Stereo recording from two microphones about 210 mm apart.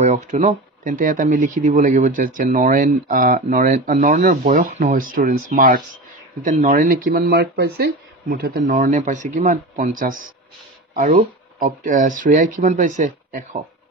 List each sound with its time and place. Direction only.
0.0 s speech: 35° right (ahead or behind)